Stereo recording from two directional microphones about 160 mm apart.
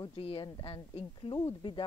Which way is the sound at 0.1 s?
35° left (ahead or behind).